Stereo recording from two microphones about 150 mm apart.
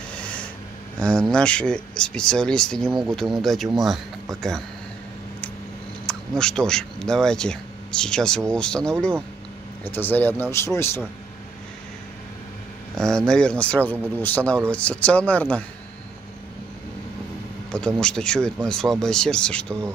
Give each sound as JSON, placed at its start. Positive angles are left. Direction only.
{"t": 0.1, "sound": "a sound", "side_deg": 10}
{"t": 0.9, "sound": "speech", "side_deg": 5}
{"t": 6.0, "sound": "speech", "side_deg": 5}
{"t": 12.9, "sound": "speech", "side_deg": 5}
{"t": 17.6, "sound": "speech", "side_deg": 5}